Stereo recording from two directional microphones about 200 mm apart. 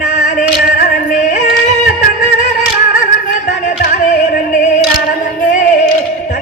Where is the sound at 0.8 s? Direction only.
40° left (ahead or behind).